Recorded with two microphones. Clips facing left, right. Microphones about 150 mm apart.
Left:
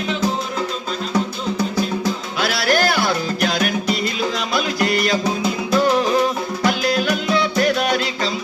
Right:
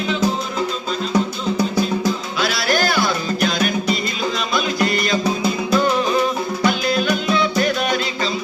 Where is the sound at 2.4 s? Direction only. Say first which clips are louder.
Left 3 dB; 60° left (ahead or behind).